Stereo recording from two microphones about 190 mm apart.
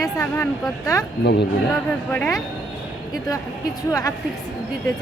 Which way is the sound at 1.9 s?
5° left (ahead or behind).